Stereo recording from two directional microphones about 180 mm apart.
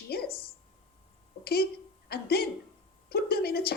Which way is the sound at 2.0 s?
60° left (ahead or behind).